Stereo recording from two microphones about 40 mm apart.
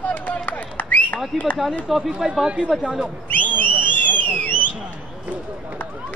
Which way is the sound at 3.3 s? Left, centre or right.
Left.